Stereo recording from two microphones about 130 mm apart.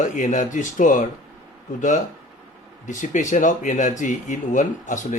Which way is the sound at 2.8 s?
75° left (ahead or behind).